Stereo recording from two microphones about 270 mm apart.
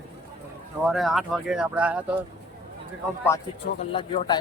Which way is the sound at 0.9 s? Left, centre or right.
Centre.